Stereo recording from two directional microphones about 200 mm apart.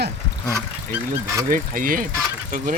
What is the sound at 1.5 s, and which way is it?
Speech, 45° right (ahead or behind).